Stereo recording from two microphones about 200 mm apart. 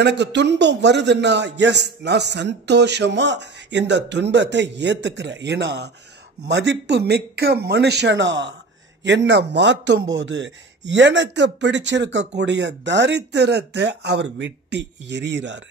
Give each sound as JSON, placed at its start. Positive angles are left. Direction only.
{"t": 0.0, "sound": "a man's voice", "side_deg": -60}